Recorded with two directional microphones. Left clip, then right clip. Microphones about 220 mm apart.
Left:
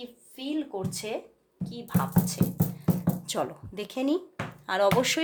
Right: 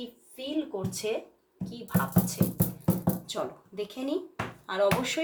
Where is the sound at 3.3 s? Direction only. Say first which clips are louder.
Left 3 dB; 50° left (ahead or behind).